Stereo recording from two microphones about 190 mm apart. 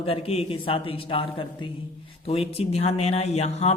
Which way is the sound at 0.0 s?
30° left (ahead or behind).